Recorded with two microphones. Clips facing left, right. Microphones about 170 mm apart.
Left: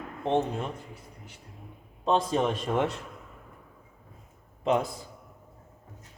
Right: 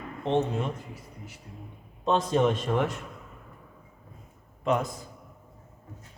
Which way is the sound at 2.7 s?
25° left (ahead or behind).